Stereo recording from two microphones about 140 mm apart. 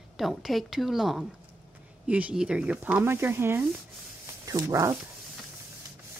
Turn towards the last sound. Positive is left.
turn(degrees=-20)  # may be behind; listen again after turning